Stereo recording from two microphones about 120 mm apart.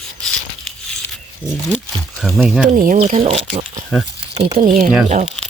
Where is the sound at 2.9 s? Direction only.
80° right.